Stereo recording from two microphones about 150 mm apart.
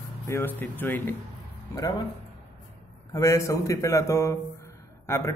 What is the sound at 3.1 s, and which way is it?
Speech, 20° left (ahead or behind).